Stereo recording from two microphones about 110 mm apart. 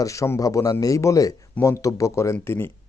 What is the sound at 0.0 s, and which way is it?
Speech, 30° left (ahead or behind).